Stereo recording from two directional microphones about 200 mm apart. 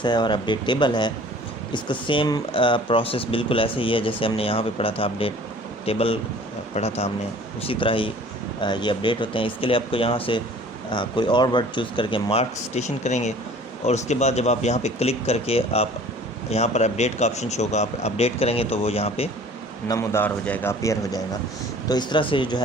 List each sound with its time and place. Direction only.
0.0 s speech: 20° left (ahead or behind)
19.9 s a man's voice: 15° left (ahead or behind)